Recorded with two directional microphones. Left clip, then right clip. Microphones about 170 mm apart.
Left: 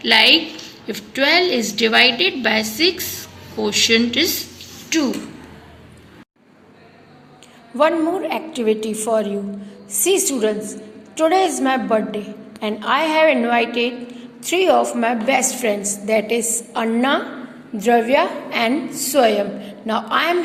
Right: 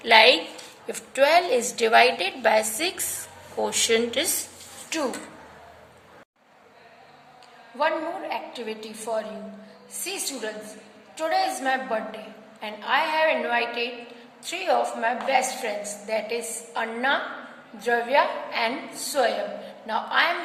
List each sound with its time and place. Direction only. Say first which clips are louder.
0.0 s a woman's voice: left 3 dB; 30° right (ahead or behind)
7.8 s a woman's voice: left 9 dB; 40° left (ahead or behind)
13.7 s a woman's voice: left 8 dB; centre (ahead or behind)
14.4 s a woman's voice: left 9 dB; 35° left (ahead or behind)